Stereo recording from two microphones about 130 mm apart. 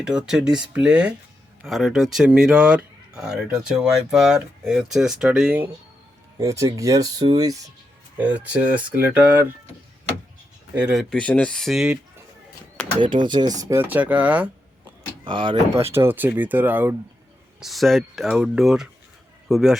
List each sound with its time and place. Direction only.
0.0 s speech: 5° right (ahead or behind)
6.4 s speech: 25° right (ahead or behind)
8.2 s speech: 10° right (ahead or behind)
10.8 s speech: 10° right (ahead or behind)
11.1 s speech: 10° left (ahead or behind)
13.0 s speech: 40° right (ahead or behind); by 14.5 s 10° right (ahead or behind)
15.2 s speech: 40° right (ahead or behind)
15.7 s speech: 20° right (ahead or behind)
17.6 s speech: centre (ahead or behind)